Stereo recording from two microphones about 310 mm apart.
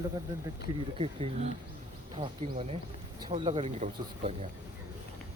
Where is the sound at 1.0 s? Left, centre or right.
Centre.